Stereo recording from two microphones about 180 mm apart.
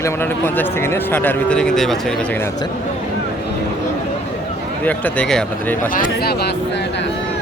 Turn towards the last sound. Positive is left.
turn(degrees=50)  # may be behind; listen again after turning